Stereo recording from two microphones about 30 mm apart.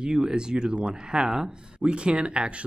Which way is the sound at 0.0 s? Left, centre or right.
Right.